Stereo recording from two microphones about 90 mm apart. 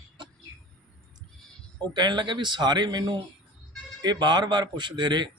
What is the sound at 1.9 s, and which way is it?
Speech, 55° right (ahead or behind).